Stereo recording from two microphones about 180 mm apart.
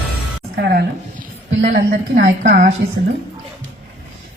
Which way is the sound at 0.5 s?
60° right (ahead or behind).